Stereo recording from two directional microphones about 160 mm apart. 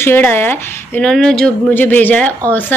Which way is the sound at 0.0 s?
15° left (ahead or behind).